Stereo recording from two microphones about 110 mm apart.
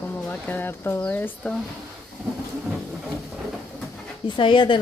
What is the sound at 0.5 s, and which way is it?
Speech, 20° left (ahead or behind).